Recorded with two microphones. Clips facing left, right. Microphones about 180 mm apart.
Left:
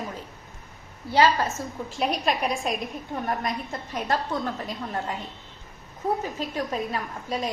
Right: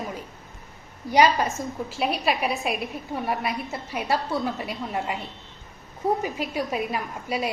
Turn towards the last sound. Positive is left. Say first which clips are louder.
# right 1 dB
turn(degrees=-10)  # may be behind; listen again after turning